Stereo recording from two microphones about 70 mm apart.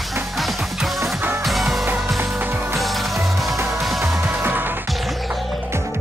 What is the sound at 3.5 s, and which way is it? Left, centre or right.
Music, right.